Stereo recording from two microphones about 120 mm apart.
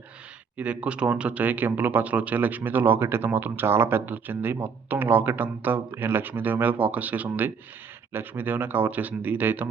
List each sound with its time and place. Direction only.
0.5 s speech: 10° right (ahead or behind)